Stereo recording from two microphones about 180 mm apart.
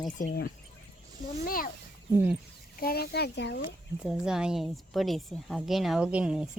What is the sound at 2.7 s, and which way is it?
Speech, 55° left (ahead or behind).